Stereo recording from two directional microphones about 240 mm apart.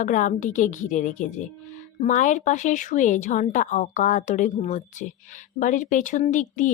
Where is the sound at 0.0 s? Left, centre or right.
Left.